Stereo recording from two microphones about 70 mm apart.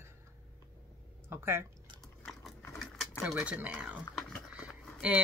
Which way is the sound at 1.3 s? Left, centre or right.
Right.